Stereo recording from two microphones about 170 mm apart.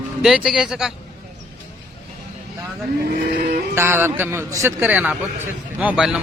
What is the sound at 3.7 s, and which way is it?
A man's voice, 15° right (ahead or behind).